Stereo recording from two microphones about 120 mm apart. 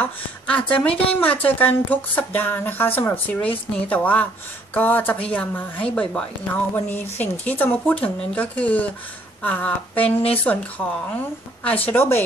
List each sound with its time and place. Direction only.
0.0 s a woman's voice: 10° left (ahead or behind)
11.6 s a woman's voice: 15° left (ahead or behind)